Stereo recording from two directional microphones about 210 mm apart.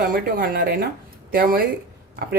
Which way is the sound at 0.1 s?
45° right (ahead or behind).